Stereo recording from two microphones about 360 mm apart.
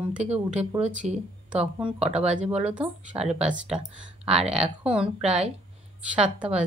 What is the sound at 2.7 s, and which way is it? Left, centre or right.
Speech, centre.